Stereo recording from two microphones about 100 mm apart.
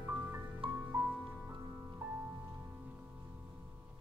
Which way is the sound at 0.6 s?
65° right (ahead or behind).